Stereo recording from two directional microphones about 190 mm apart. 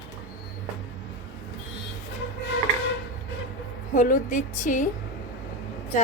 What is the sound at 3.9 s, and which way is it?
Speech, 45° left (ahead or behind).